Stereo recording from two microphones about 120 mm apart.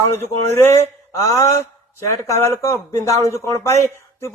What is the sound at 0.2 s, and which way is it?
Speech, 20° left (ahead or behind).